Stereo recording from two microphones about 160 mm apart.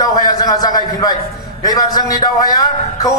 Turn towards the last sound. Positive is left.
turn(degrees=20)  # may be behind; listen again after turning